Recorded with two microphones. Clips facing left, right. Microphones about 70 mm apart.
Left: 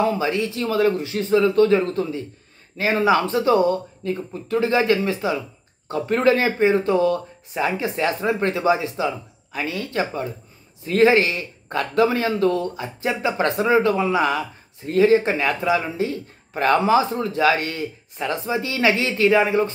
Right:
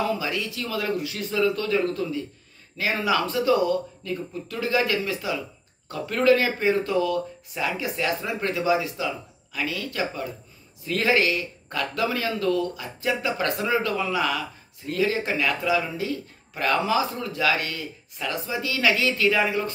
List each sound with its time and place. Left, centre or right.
0.0 s a man's voice: left